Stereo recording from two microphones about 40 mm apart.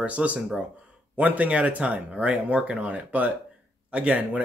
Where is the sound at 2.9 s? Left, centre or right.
Right.